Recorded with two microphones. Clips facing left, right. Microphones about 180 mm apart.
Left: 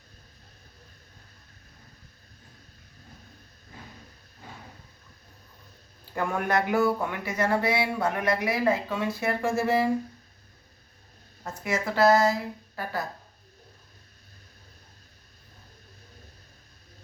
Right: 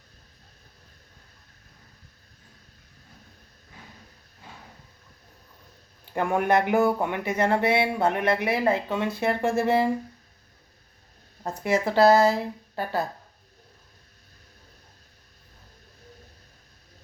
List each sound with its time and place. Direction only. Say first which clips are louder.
6.1 s speech: right 4 dB; 20° right (ahead or behind)
11.4 s speech: right 5 dB; 30° right (ahead or behind)